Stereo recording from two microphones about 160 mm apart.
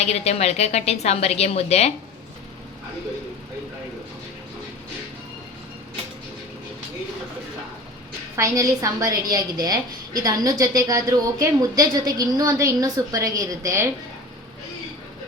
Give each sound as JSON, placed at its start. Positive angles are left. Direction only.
{"t": 0.0, "sound": "a woman's voice", "side_deg": 40}
{"t": 8.4, "sound": "a woman's voice", "side_deg": -20}